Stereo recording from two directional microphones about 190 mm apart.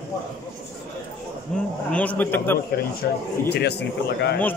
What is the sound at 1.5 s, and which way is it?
A man's voice, 5° left (ahead or behind).